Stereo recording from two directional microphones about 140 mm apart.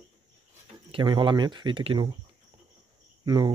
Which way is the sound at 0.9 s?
35° right (ahead or behind).